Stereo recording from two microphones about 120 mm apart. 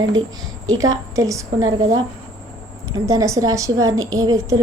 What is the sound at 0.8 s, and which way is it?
A woman's voice, 30° right (ahead or behind).